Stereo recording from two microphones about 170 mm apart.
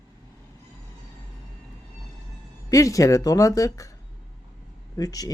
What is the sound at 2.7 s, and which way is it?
Speech, 20° left (ahead or behind).